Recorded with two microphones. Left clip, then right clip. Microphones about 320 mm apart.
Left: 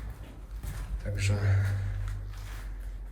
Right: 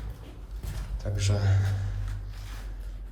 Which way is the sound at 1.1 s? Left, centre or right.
Centre.